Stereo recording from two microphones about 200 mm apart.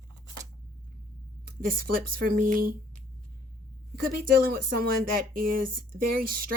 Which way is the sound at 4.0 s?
45° right (ahead or behind).